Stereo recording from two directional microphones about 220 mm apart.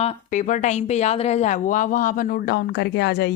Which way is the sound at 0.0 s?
30° left (ahead or behind).